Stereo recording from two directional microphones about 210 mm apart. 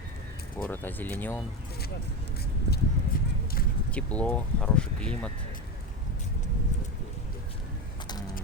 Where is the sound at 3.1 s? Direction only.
40° left (ahead or behind).